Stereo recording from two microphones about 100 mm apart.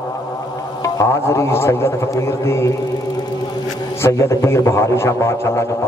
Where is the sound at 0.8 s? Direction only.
30° left (ahead or behind).